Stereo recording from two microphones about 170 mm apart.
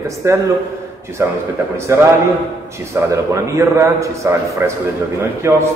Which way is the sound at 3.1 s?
15° right (ahead or behind).